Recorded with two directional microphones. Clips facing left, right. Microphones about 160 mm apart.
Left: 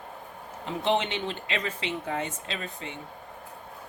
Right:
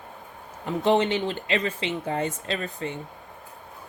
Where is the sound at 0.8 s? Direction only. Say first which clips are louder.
Right 5 dB; 40° right (ahead or behind).